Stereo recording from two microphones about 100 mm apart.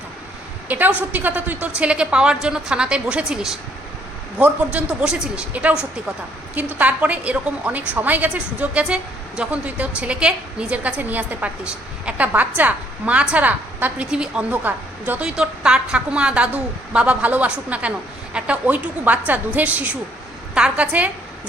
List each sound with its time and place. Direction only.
0.7 s a woman's voice: 15° right (ahead or behind)